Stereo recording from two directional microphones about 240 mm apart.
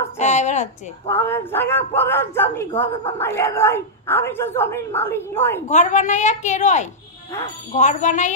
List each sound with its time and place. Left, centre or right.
0.2 s a sound: left
1.0 s speech: centre
5.7 s a woman's voice: left